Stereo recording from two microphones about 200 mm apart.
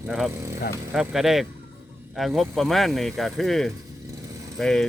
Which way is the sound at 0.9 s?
Centre (ahead or behind).